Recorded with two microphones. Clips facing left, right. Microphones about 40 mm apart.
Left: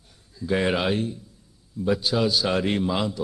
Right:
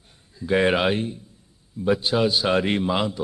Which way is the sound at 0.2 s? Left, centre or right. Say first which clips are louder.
Right 4 dB; right.